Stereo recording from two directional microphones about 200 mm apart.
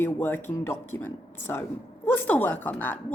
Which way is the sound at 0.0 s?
10° left (ahead or behind).